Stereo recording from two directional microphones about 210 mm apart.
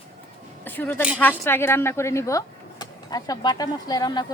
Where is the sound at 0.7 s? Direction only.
10° left (ahead or behind).